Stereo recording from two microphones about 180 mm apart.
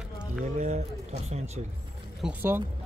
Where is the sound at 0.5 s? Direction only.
40° right (ahead or behind).